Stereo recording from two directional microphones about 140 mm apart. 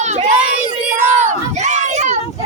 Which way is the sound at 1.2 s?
55° right (ahead or behind).